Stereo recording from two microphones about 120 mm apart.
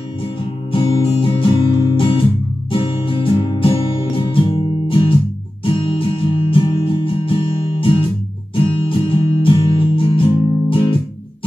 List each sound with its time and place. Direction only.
0.7 s music: 45° left (ahead or behind)
1.8 s guitar: 45° left (ahead or behind)
2.7 s music: 50° left (ahead or behind)